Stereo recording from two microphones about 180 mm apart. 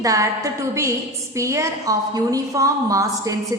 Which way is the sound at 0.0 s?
20° right (ahead or behind).